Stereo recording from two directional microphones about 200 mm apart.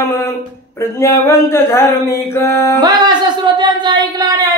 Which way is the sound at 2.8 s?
20° right (ahead or behind).